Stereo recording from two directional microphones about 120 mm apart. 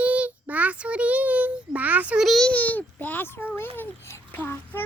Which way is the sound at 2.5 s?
15° left (ahead or behind).